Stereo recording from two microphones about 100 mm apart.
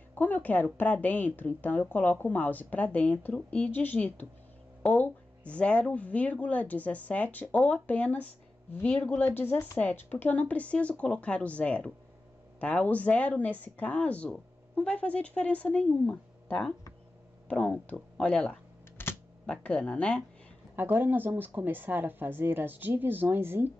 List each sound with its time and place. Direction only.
0.1 s a woman's voice: 15° left (ahead or behind)
19.0 s camera: 20° left (ahead or behind)
19.4 s speech: 10° left (ahead or behind)
20.7 s speech: 20° right (ahead or behind)